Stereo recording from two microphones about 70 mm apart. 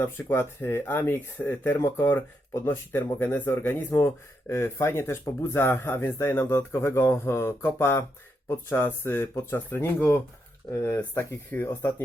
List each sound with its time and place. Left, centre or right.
0.0 s speech: left